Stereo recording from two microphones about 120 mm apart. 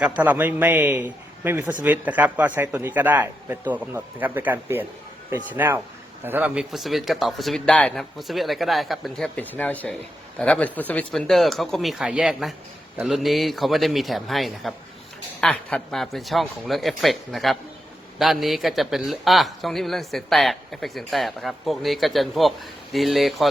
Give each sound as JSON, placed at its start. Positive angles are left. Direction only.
{"t": 0.0, "sound": "a man's voice", "side_deg": -15}
{"t": 8.2, "sound": "a man's voice", "side_deg": 0}